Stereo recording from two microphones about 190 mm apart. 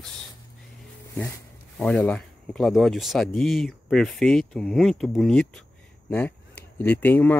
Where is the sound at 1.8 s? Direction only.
5° left (ahead or behind).